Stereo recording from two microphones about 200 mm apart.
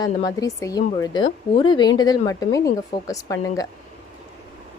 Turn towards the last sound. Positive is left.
turn(degrees=15)  # may be behind; listen again after turning